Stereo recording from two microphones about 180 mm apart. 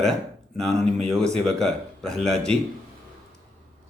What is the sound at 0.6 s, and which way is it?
Speech, 40° right (ahead or behind).